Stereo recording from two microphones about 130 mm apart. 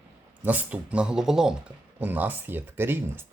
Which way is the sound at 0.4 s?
10° right (ahead or behind).